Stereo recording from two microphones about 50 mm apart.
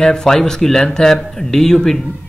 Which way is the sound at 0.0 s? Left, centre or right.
Centre.